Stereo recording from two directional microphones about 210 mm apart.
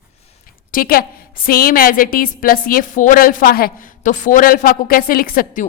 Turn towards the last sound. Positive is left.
turn(degrees=40)  # may be behind; listen again after turning